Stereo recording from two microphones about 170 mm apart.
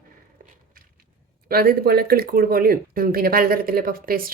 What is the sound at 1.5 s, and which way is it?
Speech, 65° right (ahead or behind).